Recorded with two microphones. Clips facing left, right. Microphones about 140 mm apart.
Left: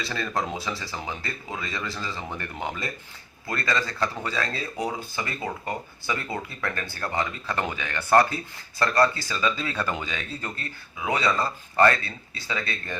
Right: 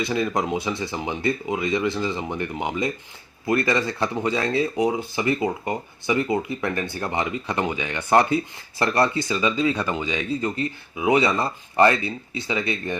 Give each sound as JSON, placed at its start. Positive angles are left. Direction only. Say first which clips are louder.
{"t": 0.0, "sound": "speech", "louder": "right 6 dB", "side_deg": -15}
{"t": 9.4, "sound": "speech", "louder": "right 4 dB", "side_deg": -10}